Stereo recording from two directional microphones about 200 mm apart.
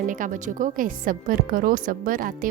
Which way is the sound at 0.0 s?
40° right (ahead or behind).